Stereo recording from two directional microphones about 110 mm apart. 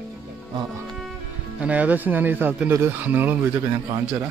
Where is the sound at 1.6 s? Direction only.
15° right (ahead or behind).